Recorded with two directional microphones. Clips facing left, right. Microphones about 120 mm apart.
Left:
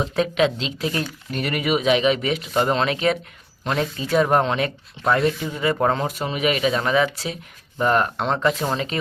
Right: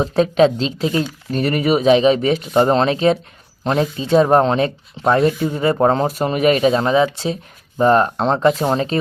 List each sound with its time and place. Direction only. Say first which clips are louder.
0.0 s speech: right 6 dB; 35° right (ahead or behind)